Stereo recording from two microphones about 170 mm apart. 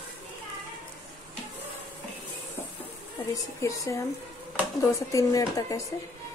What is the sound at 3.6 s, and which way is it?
Speech, 20° left (ahead or behind).